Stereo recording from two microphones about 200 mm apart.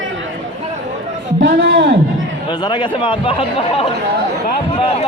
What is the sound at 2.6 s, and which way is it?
Speech, 20° left (ahead or behind).